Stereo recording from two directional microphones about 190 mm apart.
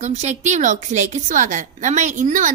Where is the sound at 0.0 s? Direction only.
35° right (ahead or behind).